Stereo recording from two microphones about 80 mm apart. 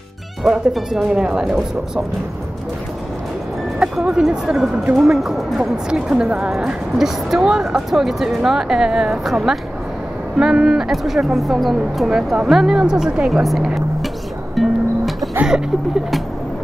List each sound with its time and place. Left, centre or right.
0.4 s speech: centre
3.8 s a woman's voice: centre
14.5 s music: centre
15.4 s a woman's voice: centre